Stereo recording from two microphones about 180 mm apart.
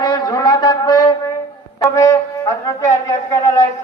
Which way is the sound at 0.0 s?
20° left (ahead or behind).